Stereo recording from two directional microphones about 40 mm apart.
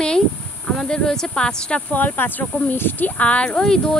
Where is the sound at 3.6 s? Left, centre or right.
Centre.